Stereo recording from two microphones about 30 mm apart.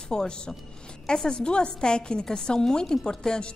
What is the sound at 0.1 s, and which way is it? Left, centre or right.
A woman's voice, left.